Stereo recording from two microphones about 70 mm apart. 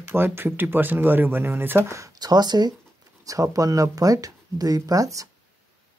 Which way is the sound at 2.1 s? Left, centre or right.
Right.